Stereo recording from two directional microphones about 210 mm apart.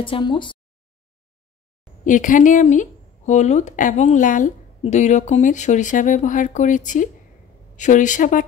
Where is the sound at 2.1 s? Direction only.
40° left (ahead or behind).